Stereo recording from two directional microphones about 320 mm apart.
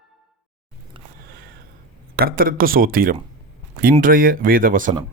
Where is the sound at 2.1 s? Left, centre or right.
Right.